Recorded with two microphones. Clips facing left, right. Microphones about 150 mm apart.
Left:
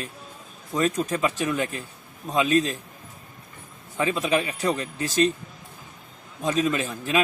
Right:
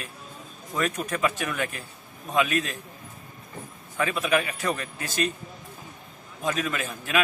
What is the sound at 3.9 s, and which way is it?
Speech, 20° left (ahead or behind).